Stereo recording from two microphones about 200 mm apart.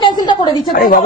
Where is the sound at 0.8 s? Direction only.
45° left (ahead or behind).